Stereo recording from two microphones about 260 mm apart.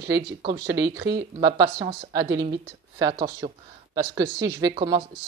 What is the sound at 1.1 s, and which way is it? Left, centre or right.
Speech, right.